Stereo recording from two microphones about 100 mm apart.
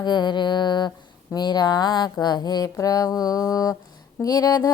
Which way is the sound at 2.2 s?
45° left (ahead or behind).